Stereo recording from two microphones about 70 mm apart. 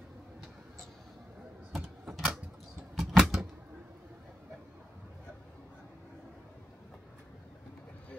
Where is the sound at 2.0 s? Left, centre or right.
Centre.